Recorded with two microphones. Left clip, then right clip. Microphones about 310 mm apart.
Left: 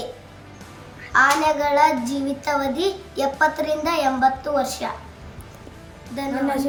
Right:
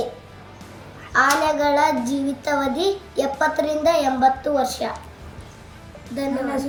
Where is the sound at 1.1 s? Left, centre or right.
Centre.